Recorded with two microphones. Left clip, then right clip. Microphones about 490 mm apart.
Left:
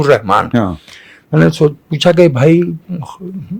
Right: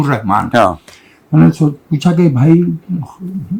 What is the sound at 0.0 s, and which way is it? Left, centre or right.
Speech, left.